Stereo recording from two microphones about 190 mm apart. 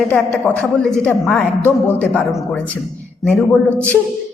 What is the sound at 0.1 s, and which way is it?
Speech, 5° left (ahead or behind).